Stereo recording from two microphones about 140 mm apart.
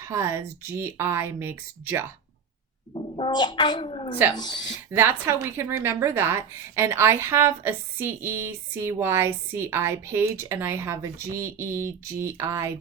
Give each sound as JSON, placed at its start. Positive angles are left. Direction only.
{"t": 0.0, "sound": "speech", "side_deg": -20}
{"t": 2.9, "sound": "speech", "side_deg": 40}
{"t": 4.9, "sound": "speech", "side_deg": -15}